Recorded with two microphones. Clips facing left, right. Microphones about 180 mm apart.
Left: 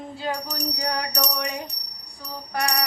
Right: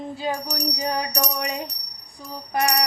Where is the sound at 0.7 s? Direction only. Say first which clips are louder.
Right 2 dB; 20° right (ahead or behind).